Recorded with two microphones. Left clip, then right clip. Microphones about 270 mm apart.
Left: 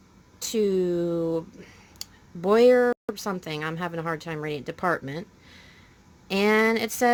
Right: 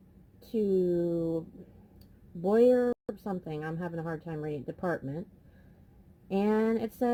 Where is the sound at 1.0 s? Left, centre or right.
Left.